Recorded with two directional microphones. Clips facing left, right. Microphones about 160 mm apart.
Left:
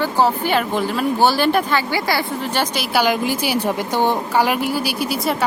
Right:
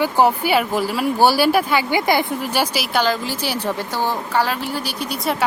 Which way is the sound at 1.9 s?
20° right (ahead or behind).